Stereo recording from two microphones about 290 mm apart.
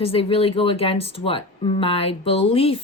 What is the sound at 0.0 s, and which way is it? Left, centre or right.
Speech, centre.